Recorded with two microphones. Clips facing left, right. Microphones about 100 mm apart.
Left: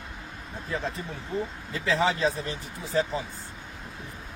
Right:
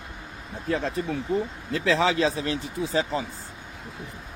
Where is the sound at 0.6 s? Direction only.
75° right (ahead or behind).